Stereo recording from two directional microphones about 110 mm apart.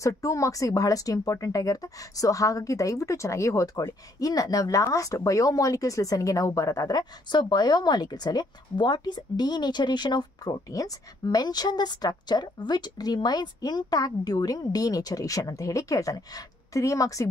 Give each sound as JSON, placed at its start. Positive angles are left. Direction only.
{"t": 0.0, "sound": "speech", "side_deg": 30}